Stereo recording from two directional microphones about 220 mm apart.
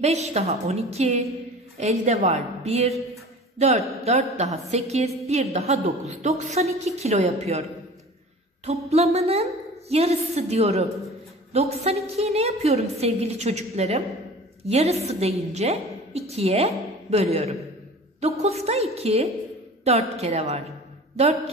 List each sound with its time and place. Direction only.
0.0 s a woman's voice: 30° right (ahead or behind)
8.6 s a woman's voice: 30° right (ahead or behind)